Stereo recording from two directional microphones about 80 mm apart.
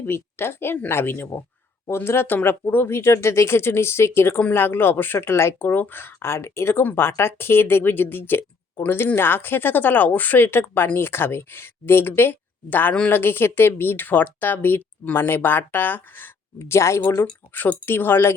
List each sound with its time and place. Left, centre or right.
0.0 s speech: left
16.6 s speech: left
17.5 s speech: left